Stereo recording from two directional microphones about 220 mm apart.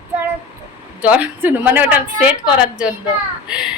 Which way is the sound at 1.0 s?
5° right (ahead or behind).